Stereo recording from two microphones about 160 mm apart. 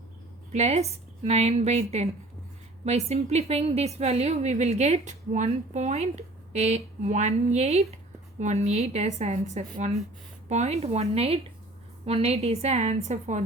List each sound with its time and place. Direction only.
0.5 s a woman's voice: 45° right (ahead or behind)